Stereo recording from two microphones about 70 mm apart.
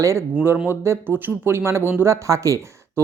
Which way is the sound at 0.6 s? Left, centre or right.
Right.